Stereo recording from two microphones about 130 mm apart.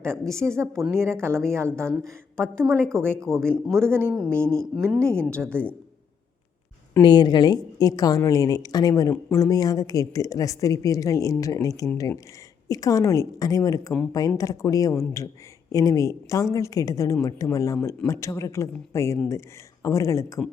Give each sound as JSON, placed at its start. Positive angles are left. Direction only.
{"t": 0.0, "sound": "a woman's voice", "side_deg": 5}
{"t": 0.9, "sound": "a woman's voice", "side_deg": -20}
{"t": 3.3, "sound": "a woman's voice", "side_deg": 5}
{"t": 3.8, "sound": "a woman's voice", "side_deg": -20}
{"t": 5.3, "sound": "a woman's voice", "side_deg": 10}
{"t": 7.0, "sound": "a woman's voice", "side_deg": 35}